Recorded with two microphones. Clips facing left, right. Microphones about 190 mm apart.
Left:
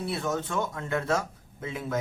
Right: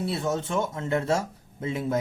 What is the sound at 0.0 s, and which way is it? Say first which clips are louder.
Speech: right 2 dB; 25° right (ahead or behind).